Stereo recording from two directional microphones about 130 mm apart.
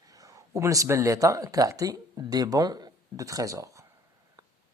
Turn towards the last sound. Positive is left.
turn(degrees=-25)  # may be behind; listen again after turning